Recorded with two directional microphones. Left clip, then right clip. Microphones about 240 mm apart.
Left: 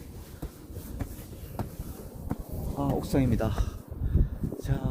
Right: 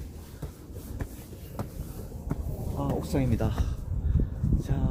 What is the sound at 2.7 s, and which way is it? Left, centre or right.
Speech, left.